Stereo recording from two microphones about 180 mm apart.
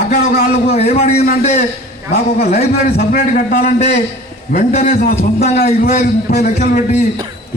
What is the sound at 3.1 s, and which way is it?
A man's voice, 55° left (ahead or behind).